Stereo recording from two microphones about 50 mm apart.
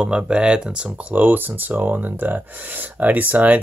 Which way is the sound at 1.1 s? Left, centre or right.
Right.